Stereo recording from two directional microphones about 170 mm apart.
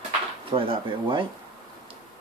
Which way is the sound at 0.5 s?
30° right (ahead or behind).